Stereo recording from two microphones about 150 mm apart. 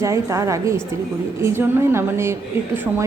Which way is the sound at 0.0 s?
20° right (ahead or behind).